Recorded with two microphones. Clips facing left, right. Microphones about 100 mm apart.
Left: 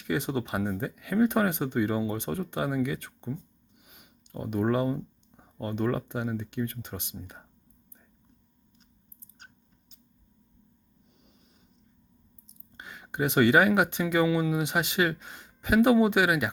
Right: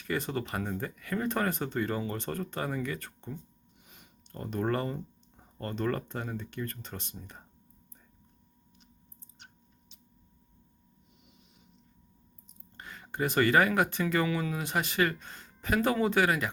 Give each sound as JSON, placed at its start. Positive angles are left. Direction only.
{"t": 0.0, "sound": "speech", "side_deg": 20}
{"t": 12.7, "sound": "speech", "side_deg": 20}